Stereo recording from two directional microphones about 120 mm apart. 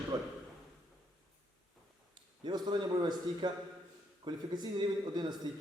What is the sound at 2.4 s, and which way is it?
Speech, 40° right (ahead or behind).